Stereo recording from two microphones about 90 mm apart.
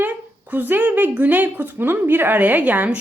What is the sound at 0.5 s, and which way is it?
A woman's voice, 20° right (ahead or behind).